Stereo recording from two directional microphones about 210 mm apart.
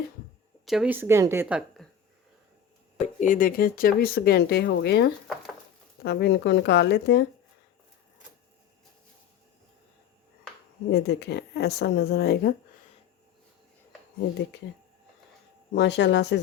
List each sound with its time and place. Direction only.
0.6 s a woman's voice: centre (ahead or behind)
3.0 s speech: 35° left (ahead or behind); by 7.3 s 55° left (ahead or behind)
10.9 s speech: 50° left (ahead or behind)
15.7 s speech: 55° left (ahead or behind)